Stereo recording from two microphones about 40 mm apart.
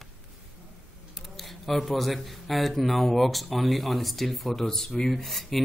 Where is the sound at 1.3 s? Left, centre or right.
Centre.